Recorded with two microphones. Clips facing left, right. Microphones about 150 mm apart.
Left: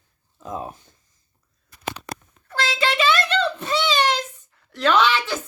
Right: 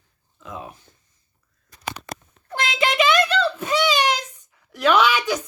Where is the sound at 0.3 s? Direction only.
40° left (ahead or behind).